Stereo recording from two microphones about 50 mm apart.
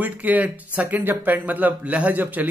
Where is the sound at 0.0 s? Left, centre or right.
Right.